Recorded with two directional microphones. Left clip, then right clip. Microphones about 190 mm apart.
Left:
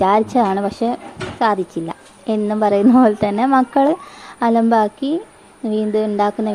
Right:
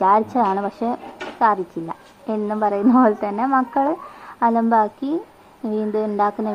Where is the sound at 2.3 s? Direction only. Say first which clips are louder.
Left 4 dB; 50° left (ahead or behind).